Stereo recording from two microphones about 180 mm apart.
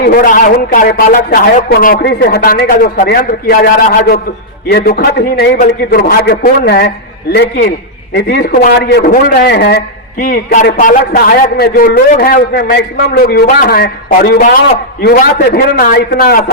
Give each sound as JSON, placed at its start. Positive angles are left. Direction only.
{"t": 0.0, "sound": "a man's voice", "side_deg": 55}
{"t": 8.9, "sound": "a man's voice", "side_deg": 60}